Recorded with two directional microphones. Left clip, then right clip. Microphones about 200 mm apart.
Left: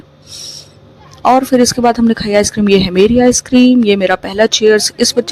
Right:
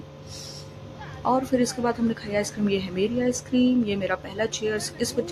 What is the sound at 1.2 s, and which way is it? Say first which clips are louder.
Speech: left 14 dB; 50° left (ahead or behind).